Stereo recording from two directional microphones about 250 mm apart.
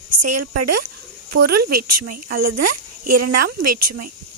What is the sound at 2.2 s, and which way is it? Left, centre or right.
Speech, right.